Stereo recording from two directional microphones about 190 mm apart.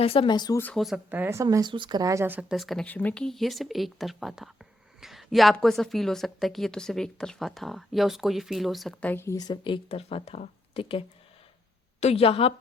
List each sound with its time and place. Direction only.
0.0 s speech: 30° left (ahead or behind)
0.6 s a woman's voice: 5° left (ahead or behind); by 12.5 s 30° left (ahead or behind)